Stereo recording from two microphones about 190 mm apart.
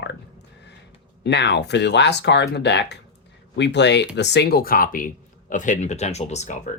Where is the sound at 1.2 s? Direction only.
65° left (ahead or behind); by 6.5 s 35° left (ahead or behind).